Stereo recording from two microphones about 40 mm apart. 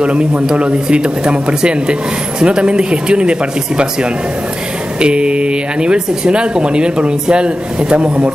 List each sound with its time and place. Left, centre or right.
0.0 s speech: right